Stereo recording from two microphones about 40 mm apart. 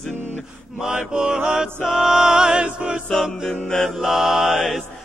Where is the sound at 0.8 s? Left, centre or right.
Centre.